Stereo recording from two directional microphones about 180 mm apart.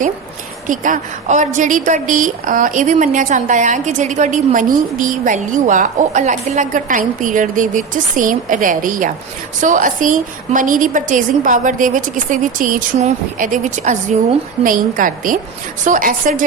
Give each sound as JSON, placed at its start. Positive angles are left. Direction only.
{"t": 0.7, "sound": "a woman's voice", "side_deg": -45}